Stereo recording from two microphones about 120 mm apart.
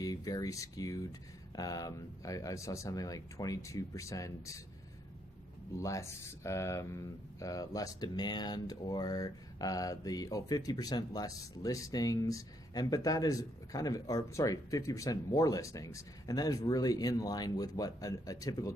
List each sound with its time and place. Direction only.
0.0 s speech: 30° left (ahead or behind)
5.8 s speech: 25° left (ahead or behind)